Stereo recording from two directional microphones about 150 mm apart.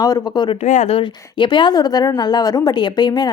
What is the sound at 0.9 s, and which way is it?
A woman's voice, 30° left (ahead or behind).